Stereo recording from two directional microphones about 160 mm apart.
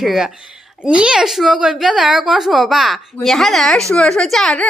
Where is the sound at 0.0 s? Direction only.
Centre (ahead or behind).